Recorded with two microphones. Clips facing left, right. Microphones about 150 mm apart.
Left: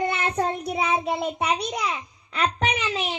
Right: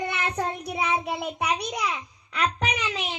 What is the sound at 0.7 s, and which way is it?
Child singing, 25° left (ahead or behind).